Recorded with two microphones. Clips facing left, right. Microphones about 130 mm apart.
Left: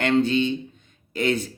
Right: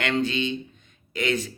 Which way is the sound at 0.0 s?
40° left (ahead or behind).